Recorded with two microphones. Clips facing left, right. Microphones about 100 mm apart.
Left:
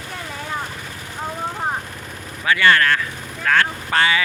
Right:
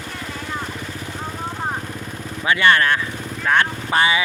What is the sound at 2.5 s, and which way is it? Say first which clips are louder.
Speech: even; 20° right (ahead or behind).